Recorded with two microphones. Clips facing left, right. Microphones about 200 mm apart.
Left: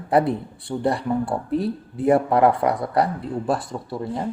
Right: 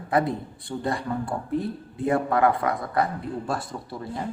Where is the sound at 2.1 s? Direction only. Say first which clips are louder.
Left 5 dB; 30° left (ahead or behind).